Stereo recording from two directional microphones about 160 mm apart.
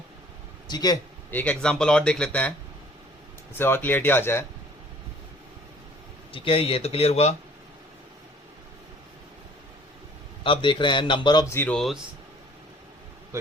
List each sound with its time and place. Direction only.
0.7 s a man's voice: 25° left (ahead or behind)
1.3 s a man's voice: 10° left (ahead or behind)
3.6 s a man's voice: 15° left (ahead or behind)
6.3 s a man's voice: 35° left (ahead or behind)
10.4 s a man's voice: 30° left (ahead or behind)
11.5 s a man's voice: 10° left (ahead or behind)
13.3 s speech: 20° right (ahead or behind)